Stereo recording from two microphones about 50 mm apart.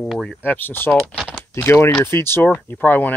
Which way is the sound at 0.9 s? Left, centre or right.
Centre.